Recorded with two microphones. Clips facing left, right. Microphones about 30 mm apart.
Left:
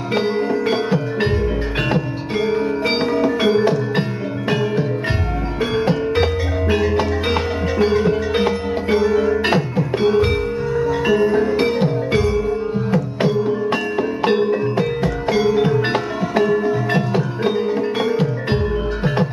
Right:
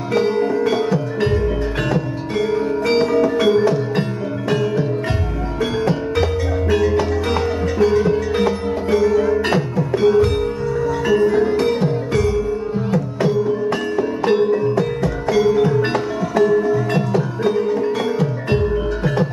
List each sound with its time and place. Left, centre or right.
0.1 s music: left
5.6 s music: left